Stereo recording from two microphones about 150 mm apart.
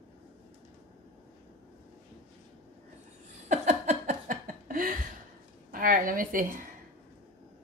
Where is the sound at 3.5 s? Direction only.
55° right (ahead or behind).